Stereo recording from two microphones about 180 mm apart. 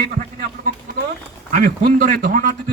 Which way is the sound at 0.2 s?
55° right (ahead or behind).